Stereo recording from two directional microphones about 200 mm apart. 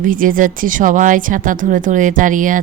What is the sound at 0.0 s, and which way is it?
A woman's voice, 45° right (ahead or behind).